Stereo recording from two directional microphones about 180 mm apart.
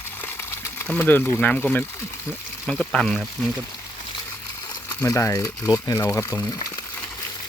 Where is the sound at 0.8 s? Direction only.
10° left (ahead or behind).